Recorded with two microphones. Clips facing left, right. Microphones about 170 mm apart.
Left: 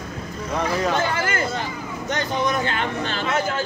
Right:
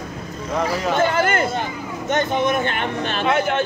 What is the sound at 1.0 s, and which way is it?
Speech, 55° right (ahead or behind).